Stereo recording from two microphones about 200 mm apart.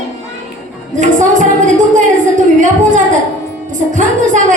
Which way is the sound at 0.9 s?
40° right (ahead or behind).